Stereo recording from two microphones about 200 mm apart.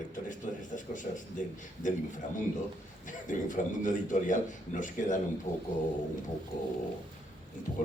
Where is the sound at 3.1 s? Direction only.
40° left (ahead or behind).